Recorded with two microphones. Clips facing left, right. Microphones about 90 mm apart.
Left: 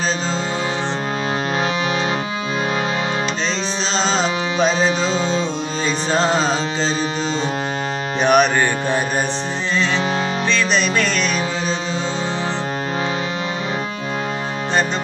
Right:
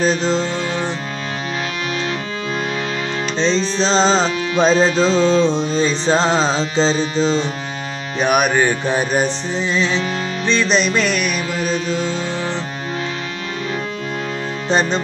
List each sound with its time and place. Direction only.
3.8 s music: 35° right (ahead or behind)
8.2 s music: 5° right (ahead or behind)
10.7 s music: 15° right (ahead or behind)
11.6 s music: 20° left (ahead or behind)